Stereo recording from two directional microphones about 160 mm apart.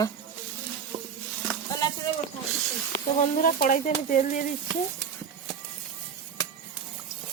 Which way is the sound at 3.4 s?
60° left (ahead or behind).